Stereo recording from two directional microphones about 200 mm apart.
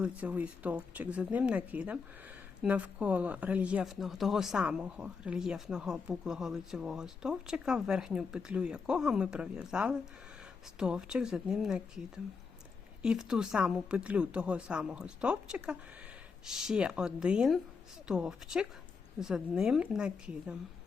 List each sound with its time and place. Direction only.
0.0 s speech: 5° right (ahead or behind)